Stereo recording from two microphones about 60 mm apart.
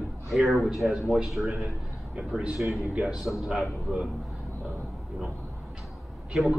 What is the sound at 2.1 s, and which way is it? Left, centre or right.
A man's voice, centre.